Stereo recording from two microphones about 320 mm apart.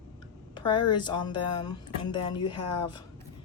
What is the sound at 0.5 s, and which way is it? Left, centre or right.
Speech, centre.